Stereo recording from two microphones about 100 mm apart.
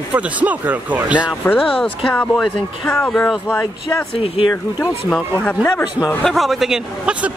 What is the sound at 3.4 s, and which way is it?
Speech, 20° left (ahead or behind).